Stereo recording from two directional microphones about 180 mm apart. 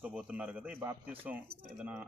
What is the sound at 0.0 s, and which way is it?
Speech, 5° right (ahead or behind).